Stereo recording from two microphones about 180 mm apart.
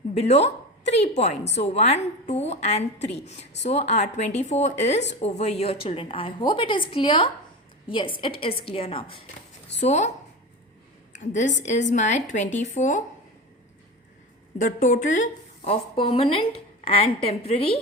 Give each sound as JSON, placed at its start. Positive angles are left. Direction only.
{"t": 0.1, "sound": "a woman's voice", "side_deg": 35}
{"t": 11.1, "sound": "a woman's voice", "side_deg": 45}
{"t": 14.6, "sound": "a woman's voice", "side_deg": 50}